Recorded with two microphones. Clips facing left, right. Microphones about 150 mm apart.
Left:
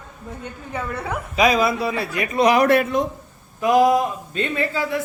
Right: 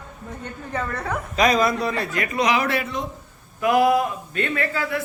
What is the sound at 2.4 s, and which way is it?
Speech, 45° left (ahead or behind).